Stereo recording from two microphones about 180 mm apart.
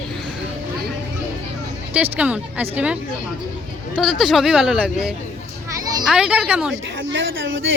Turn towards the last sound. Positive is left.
turn(degrees=-90)